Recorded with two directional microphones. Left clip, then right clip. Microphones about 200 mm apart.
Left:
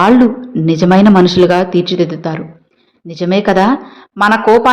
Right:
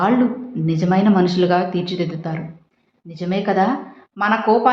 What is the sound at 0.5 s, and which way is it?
Speech, 35° left (ahead or behind).